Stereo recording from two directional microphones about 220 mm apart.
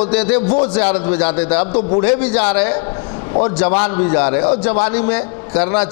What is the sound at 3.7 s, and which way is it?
Speech, 30° left (ahead or behind).